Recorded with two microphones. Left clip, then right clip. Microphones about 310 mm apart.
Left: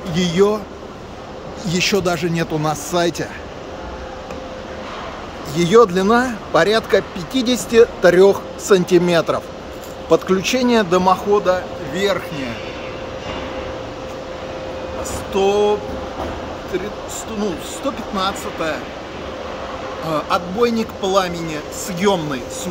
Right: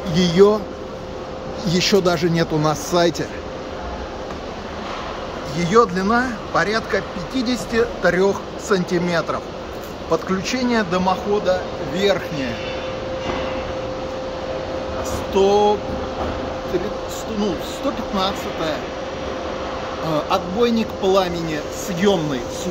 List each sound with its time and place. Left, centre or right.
0.1 s speech: centre
1.6 s speech: centre
5.6 s a man's voice: left
11.4 s speech: centre
15.3 s speech: centre
18.1 s speech: centre
20.2 s speech: centre